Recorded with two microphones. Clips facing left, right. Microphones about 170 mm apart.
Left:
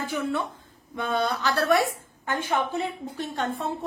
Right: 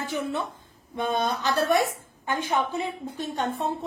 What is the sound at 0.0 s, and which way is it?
A woman's voice, 20° right (ahead or behind).